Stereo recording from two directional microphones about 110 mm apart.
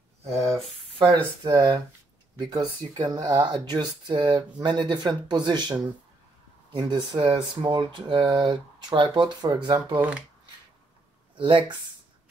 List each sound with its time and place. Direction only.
0.9 s speech: 50° right (ahead or behind)
9.9 s speech: 10° right (ahead or behind)
11.3 s speech: 50° right (ahead or behind)